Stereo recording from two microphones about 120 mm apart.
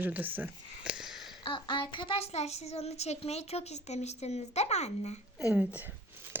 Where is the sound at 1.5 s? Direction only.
40° left (ahead or behind); by 5.2 s 70° left (ahead or behind).